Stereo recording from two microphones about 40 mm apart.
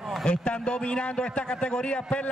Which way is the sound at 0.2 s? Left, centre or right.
Left.